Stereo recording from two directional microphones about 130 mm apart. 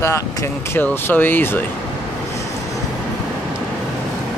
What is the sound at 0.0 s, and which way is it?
Speech, 20° left (ahead or behind).